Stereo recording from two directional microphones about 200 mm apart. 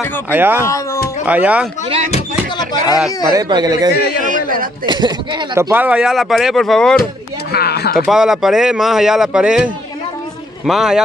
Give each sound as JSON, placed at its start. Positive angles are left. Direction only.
{"t": 0.3, "sound": "speech", "side_deg": -10}
{"t": 0.7, "sound": "speech", "side_deg": 15}
{"t": 1.2, "sound": "speech", "side_deg": -5}
{"t": 2.5, "sound": "speech", "side_deg": 20}
{"t": 3.3, "sound": "speech", "side_deg": -20}
{"t": 7.5, "sound": "a sound", "side_deg": 50}
{"t": 8.0, "sound": "speech", "side_deg": 0}